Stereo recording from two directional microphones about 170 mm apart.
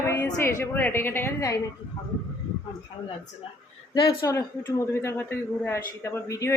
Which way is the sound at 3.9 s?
20° left (ahead or behind).